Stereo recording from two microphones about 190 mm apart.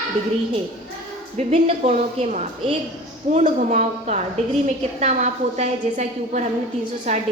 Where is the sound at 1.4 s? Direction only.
35° right (ahead or behind).